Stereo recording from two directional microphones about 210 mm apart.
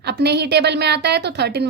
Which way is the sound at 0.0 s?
50° right (ahead or behind).